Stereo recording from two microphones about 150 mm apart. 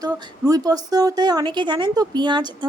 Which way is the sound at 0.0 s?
25° right (ahead or behind).